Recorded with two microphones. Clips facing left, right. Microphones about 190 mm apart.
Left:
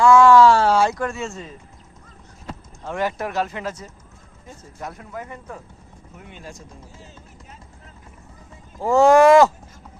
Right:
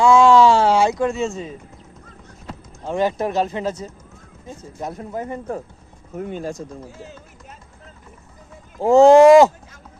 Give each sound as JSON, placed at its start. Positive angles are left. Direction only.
{"t": 0.0, "sound": "a sound", "side_deg": -20}
{"t": 2.8, "sound": "speech", "side_deg": -20}
{"t": 8.8, "sound": "speech", "side_deg": -20}